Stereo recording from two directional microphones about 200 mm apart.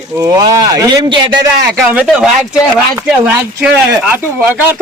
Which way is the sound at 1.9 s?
5° right (ahead or behind).